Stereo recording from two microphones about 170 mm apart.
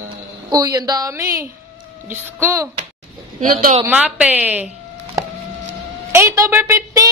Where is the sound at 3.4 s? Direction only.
55° right (ahead or behind).